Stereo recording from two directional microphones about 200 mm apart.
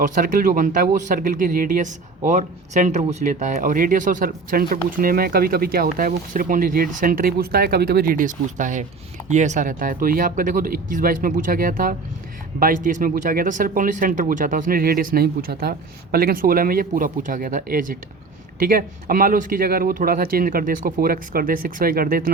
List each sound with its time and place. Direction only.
0.0 s speech: 40° right (ahead or behind)